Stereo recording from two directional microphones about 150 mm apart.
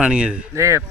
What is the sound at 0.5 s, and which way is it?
Speech, 20° right (ahead or behind).